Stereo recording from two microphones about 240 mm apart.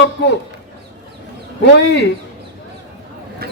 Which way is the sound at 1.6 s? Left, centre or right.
Left.